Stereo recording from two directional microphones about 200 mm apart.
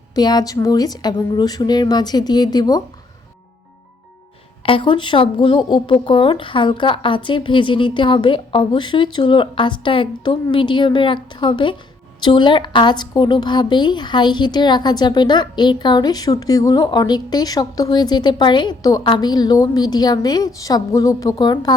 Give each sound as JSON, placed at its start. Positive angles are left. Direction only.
{"t": 0.1, "sound": "speech", "side_deg": 20}
{"t": 4.6, "sound": "speech", "side_deg": 25}